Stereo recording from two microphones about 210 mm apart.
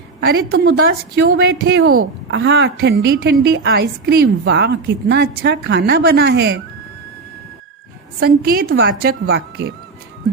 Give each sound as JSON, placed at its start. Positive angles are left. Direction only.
{"t": 0.3, "sound": "a woman's voice", "side_deg": -45}
{"t": 1.8, "sound": "a woman's voice", "side_deg": -90}
{"t": 8.2, "sound": "a woman's voice", "side_deg": -45}